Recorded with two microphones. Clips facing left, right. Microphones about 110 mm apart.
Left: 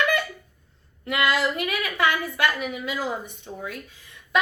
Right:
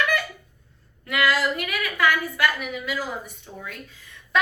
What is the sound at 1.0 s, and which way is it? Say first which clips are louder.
A woman's voice: even; 20° left (ahead or behind).